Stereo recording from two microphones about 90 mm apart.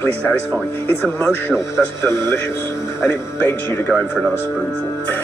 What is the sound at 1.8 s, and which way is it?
Speech, 25° left (ahead or behind).